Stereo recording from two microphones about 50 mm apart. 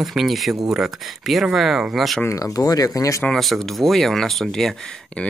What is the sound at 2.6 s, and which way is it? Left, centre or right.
Speech, left.